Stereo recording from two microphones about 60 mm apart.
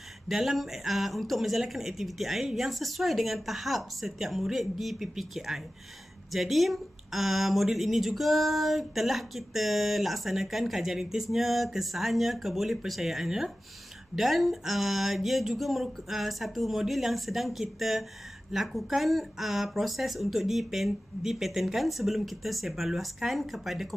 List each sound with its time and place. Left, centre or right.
0.3 s speech: centre